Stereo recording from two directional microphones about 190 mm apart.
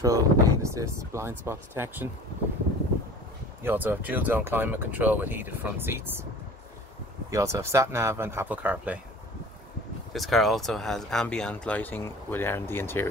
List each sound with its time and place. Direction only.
0.0 s speech: 15° right (ahead or behind)
3.6 s speech: 10° right (ahead or behind)
7.2 s speech: 15° right (ahead or behind)
10.1 s speech: centre (ahead or behind)